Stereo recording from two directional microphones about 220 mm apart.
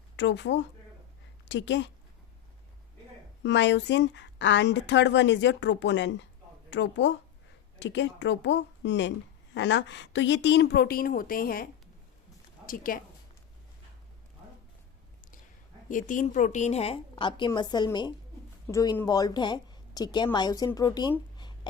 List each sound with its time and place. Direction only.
0.2 s a woman's voice: 55° left (ahead or behind)
3.4 s a woman's voice: 55° left (ahead or behind)
15.9 s a woman's voice: 35° left (ahead or behind); by 21.1 s 15° left (ahead or behind)
21.3 s a sound: 20° left (ahead or behind)